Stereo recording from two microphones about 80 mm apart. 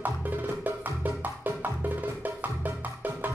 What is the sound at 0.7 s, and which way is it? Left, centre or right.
Music, right.